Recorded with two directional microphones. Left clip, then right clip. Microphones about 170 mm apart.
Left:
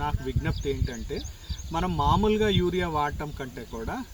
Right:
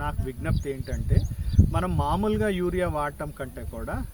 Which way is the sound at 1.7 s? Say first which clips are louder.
Left 3 dB; 15° right (ahead or behind).